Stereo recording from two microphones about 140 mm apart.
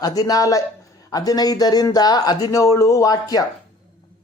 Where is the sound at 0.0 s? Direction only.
25° left (ahead or behind).